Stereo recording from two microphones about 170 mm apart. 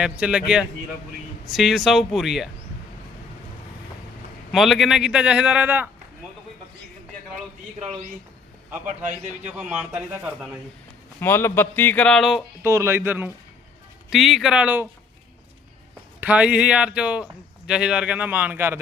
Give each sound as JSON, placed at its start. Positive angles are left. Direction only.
{"t": 0.0, "sound": "a man's voice", "side_deg": -5}
{"t": 4.5, "sound": "a man's voice", "side_deg": 0}
{"t": 9.0, "sound": "a man's voice", "side_deg": -45}
{"t": 9.5, "sound": "a man's voice", "side_deg": -5}
{"t": 11.2, "sound": "a man's voice", "side_deg": 15}
{"t": 12.6, "sound": "a man's voice", "side_deg": -15}
{"t": 14.1, "sound": "a man's voice", "side_deg": 0}
{"t": 16.2, "sound": "a man's voice", "side_deg": -10}